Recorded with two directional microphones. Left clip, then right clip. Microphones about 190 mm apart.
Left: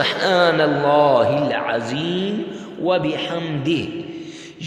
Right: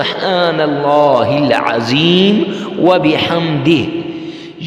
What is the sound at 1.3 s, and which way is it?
A man's voice, 40° right (ahead or behind).